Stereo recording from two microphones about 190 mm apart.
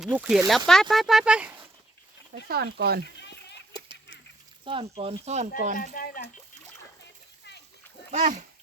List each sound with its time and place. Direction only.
0.0 s speech: 5° right (ahead or behind)
2.5 s speech: 55° right (ahead or behind)
3.7 s honk: 25° right (ahead or behind)
4.6 s speech: 30° right (ahead or behind)
5.7 s speech: 45° left (ahead or behind)
8.1 s speech: 40° right (ahead or behind)